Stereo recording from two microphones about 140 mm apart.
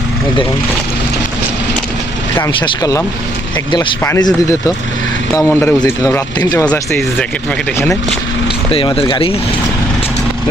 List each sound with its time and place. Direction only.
2.5 s speech: 35° left (ahead or behind)
5.3 s speech: 20° left (ahead or behind)
6.4 s speech: 25° left (ahead or behind)
6.7 s speech: 10° left (ahead or behind)
9.0 s speech: 40° left (ahead or behind)